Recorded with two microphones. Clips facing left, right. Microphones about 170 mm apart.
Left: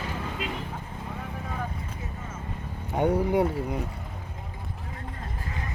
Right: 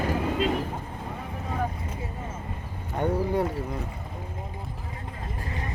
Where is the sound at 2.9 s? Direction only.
10° left (ahead or behind).